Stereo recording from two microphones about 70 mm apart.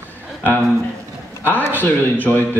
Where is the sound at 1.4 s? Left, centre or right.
Left.